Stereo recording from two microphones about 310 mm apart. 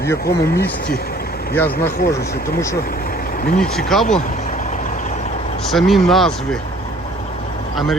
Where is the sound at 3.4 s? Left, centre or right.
Left.